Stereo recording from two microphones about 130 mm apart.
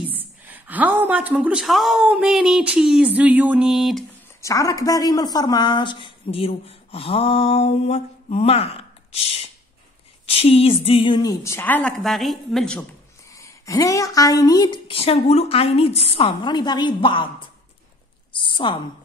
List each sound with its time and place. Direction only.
0.1 s a woman's voice: 15° right (ahead or behind)
4.4 s a woman's voice: 25° left (ahead or behind); by 11.1 s 50° left (ahead or behind)
11.1 s a woman's voice: 30° left (ahead or behind)
11.5 s a woman's voice: 15° left (ahead or behind)
12.0 s speech: centre (ahead or behind)
13.3 s speech: 25° left (ahead or behind)
14.9 s a woman's voice: 45° left (ahead or behind)
16.3 s a woman's voice: 35° left (ahead or behind)
18.4 s a sound: 40° left (ahead or behind)